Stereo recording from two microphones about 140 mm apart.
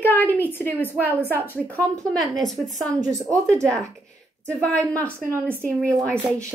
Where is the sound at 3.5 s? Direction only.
20° right (ahead or behind).